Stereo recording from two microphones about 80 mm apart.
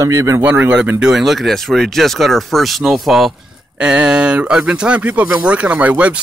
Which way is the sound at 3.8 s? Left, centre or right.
Centre.